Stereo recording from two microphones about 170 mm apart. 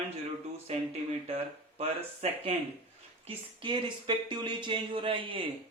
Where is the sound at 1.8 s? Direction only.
40° right (ahead or behind).